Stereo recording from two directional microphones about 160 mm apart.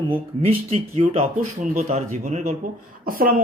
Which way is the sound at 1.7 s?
55° right (ahead or behind).